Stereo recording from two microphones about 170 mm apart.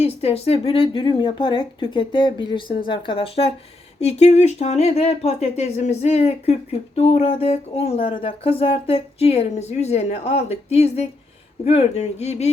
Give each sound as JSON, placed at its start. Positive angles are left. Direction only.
{"t": 0.0, "sound": "speech", "side_deg": 35}